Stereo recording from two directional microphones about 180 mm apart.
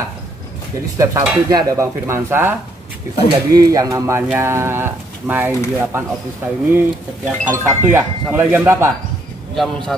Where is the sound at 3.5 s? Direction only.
20° right (ahead or behind).